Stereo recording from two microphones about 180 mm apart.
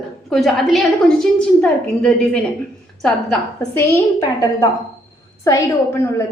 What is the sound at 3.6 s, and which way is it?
Speech, 15° left (ahead or behind).